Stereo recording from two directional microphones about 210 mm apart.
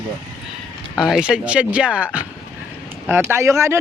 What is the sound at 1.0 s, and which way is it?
Speech, centre (ahead or behind).